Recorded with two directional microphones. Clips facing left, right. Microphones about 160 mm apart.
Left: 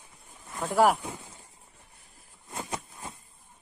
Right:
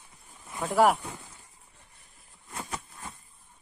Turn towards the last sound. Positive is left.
turn(degrees=20)  # may be behind; listen again after turning